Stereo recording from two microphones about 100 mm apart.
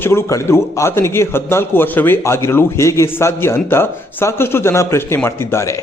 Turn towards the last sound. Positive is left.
turn(degrees=30)  # may be behind; listen again after turning